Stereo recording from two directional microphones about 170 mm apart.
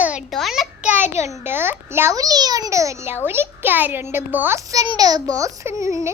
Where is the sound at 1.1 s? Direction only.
15° right (ahead or behind).